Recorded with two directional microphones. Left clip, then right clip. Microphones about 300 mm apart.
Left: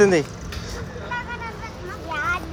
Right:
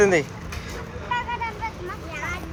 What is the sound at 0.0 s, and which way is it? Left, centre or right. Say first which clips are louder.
Speech: left 2 dB; centre.